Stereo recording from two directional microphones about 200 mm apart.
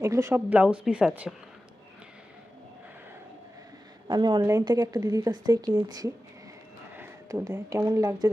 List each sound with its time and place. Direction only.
0.0 s a woman's voice: 15° right (ahead or behind)
4.1 s speech: 20° right (ahead or behind)